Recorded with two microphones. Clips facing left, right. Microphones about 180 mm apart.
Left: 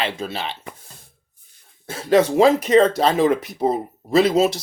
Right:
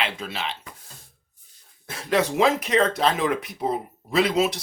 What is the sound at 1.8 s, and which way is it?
Speech, 35° left (ahead or behind).